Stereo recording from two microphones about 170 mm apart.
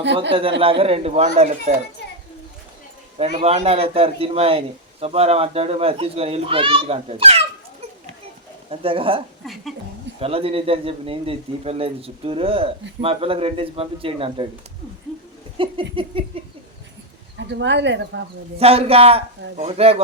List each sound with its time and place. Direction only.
0.0 s speech: 90° right
0.6 s a man's voice: 35° right (ahead or behind)
2.0 s a sound: 85° left
3.2 s a man's voice: 35° right (ahead or behind)
8.7 s a man's voice: 35° right (ahead or behind)
15.5 s a man's voice: 30° right (ahead or behind)
17.3 s speech: 90° right
18.6 s a man's voice: 35° right (ahead or behind)